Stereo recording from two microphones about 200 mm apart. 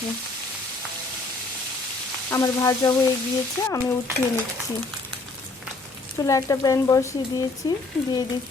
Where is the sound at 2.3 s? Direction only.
15° left (ahead or behind).